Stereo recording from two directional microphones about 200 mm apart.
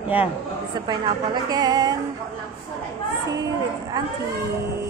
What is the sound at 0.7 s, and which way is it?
A woman's voice, 20° right (ahead or behind).